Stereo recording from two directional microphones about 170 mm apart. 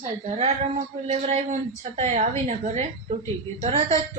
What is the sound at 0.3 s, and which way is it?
A woman's voice, 40° right (ahead or behind).